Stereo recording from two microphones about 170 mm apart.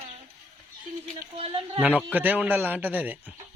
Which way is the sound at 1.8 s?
10° right (ahead or behind).